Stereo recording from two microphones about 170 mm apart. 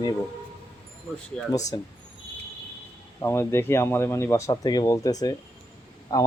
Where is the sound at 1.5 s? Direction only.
20° left (ahead or behind).